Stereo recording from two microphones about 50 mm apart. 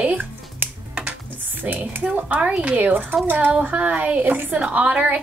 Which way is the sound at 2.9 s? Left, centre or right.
Right.